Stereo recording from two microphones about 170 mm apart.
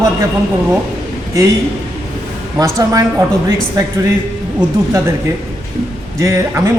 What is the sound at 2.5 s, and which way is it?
Speech, 20° right (ahead or behind).